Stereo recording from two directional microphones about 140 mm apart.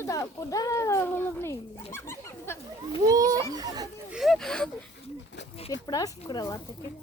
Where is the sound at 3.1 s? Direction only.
25° right (ahead or behind).